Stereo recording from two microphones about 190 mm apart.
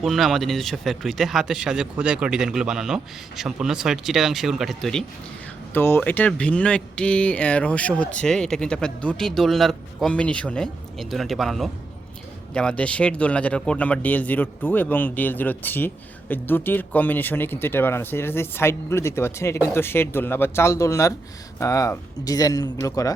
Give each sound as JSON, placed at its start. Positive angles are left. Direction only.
{"t": 0.0, "sound": "speech", "side_deg": 0}